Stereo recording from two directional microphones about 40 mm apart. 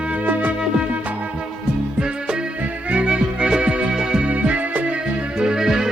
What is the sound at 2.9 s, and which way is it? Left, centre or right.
Music, right.